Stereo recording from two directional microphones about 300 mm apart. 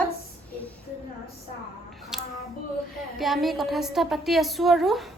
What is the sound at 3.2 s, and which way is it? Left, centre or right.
A woman's voice, centre.